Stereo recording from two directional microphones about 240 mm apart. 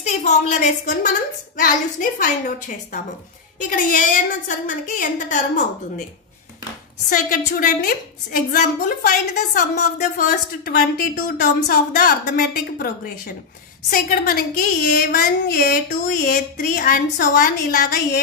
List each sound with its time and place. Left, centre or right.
0.0 s a woman's voice: left
7.1 s a woman's voice: left